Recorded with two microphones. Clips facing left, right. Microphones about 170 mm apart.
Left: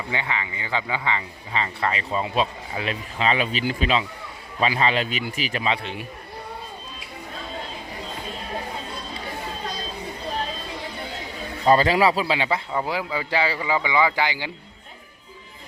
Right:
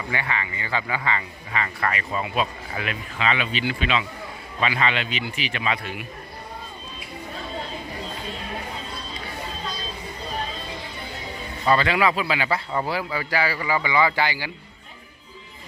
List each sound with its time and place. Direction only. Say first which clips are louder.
0.1 s a man's voice: right 1 dB; 20° left (ahead or behind); by 5.6 s 40° left (ahead or behind)
5.6 s speech: left 1 dB; 25° left (ahead or behind)
11.6 s a man's voice: left 3 dB; 40° left (ahead or behind)
12.7 s speech: even; 15° left (ahead or behind)